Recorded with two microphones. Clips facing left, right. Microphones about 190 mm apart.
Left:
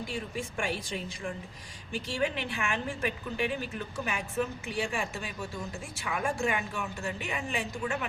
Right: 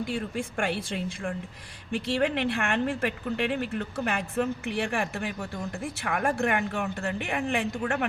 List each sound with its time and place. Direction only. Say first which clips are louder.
0.1 s speech: right 5 dB; 60° right (ahead or behind)